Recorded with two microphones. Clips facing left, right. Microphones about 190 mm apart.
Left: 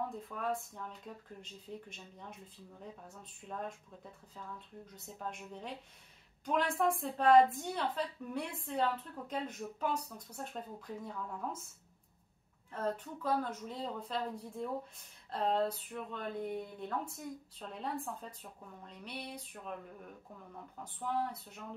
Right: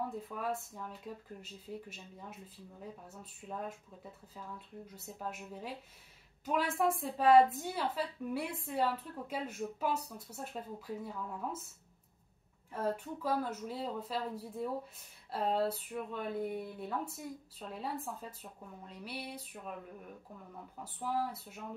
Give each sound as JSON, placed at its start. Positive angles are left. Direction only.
{"t": 0.3, "sound": "a woman's voice", "side_deg": -5}
{"t": 12.7, "sound": "a woman's voice", "side_deg": -10}
{"t": 20.8, "sound": "a woman's voice", "side_deg": -5}